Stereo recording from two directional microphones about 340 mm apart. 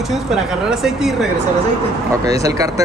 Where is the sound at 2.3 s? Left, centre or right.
Centre.